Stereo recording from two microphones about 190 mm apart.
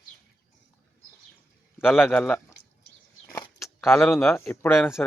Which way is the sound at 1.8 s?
10° left (ahead or behind).